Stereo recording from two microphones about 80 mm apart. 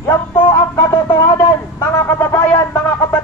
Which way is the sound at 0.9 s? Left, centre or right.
Left.